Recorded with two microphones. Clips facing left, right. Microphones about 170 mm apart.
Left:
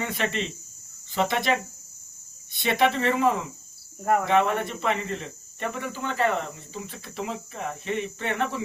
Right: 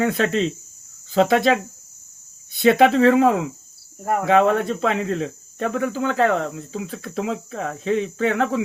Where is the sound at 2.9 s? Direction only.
90° right.